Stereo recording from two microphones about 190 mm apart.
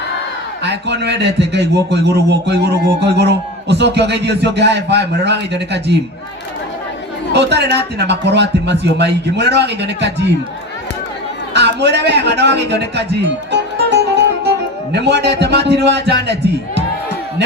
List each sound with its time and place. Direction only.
0.6 s speech: 65° right (ahead or behind)
7.3 s speech: 60° right (ahead or behind)
11.5 s speech: 65° right (ahead or behind)
13.5 s music: 60° right (ahead or behind)
14.9 s speech: 65° right (ahead or behind)